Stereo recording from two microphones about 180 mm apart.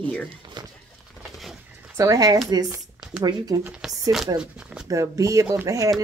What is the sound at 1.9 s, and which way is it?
Speech, 20° right (ahead or behind).